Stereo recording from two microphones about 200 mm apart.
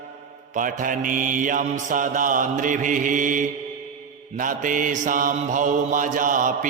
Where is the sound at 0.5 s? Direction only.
40° right (ahead or behind).